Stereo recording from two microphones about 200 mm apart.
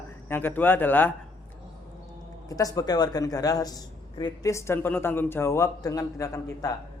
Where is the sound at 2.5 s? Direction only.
15° left (ahead or behind).